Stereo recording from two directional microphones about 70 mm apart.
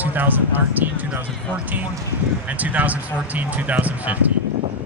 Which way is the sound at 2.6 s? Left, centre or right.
Right.